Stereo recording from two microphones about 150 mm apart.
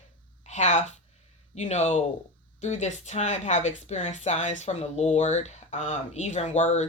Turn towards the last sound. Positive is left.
turn(degrees=50)  # may be behind; listen again after turning